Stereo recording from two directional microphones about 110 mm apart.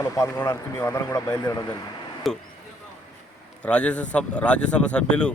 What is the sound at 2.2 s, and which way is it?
Speech, centre (ahead or behind).